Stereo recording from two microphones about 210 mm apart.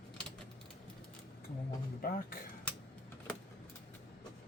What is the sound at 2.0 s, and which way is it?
Speech, 45° left (ahead or behind).